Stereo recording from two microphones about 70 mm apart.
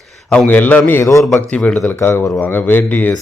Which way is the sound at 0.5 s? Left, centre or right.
Left.